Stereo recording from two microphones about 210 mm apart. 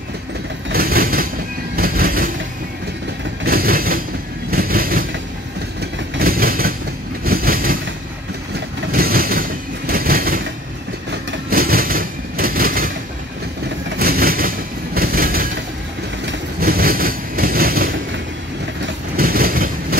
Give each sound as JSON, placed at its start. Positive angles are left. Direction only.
{"t": 0.7, "sound": "train", "side_deg": -45}
{"t": 3.4, "sound": "train", "side_deg": -45}
{"t": 5.8, "sound": "vehicle", "side_deg": -45}
{"t": 7.2, "sound": "train", "side_deg": -45}
{"t": 13.9, "sound": "train", "side_deg": -45}
{"t": 19.1, "sound": "vehicle", "side_deg": -45}